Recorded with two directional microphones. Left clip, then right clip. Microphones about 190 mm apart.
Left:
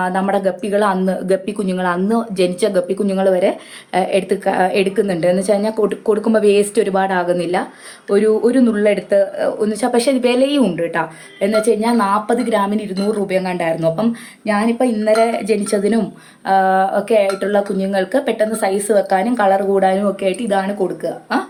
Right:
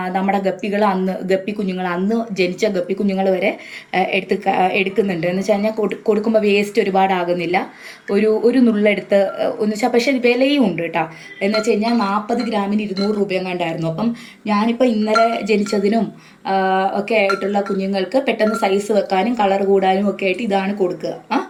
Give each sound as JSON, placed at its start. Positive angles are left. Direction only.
{"t": 0.0, "sound": "a woman's voice", "side_deg": 25}
{"t": 10.9, "sound": "speech", "side_deg": 40}